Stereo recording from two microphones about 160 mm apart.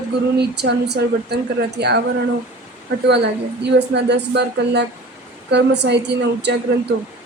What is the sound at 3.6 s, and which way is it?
A woman's voice, 90° right.